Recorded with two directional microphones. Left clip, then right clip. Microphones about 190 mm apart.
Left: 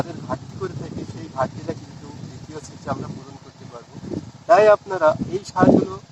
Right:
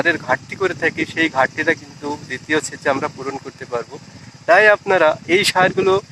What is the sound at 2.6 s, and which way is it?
Speech, 15° right (ahead or behind).